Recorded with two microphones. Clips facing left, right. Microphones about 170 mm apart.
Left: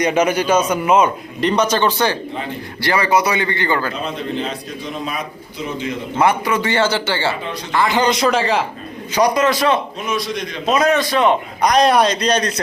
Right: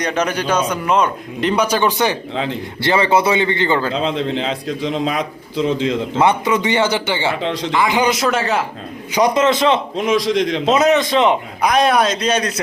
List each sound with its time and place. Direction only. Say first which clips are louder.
0.0 s a man's voice: left 3 dB; 10° left (ahead or behind); by 3.9 s 20° right (ahead or behind)
3.9 s a man's voice: right 4 dB; 90° right
6.1 s a man's voice: even; 20° right (ahead or behind)
7.4 s a man's voice: right 6 dB; 90° right
7.8 s a man's voice: left 1 dB; 10° right (ahead or behind)
9.1 s speech: right 1 dB; 20° right (ahead or behind)
10.0 s a man's voice: right 7 dB; 90° right
10.7 s speech: even; 20° right (ahead or behind)
11.6 s a man's voice: left 1 dB; 5° right (ahead or behind)